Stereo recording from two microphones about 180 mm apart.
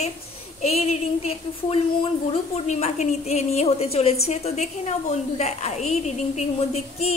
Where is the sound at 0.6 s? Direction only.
35° left (ahead or behind).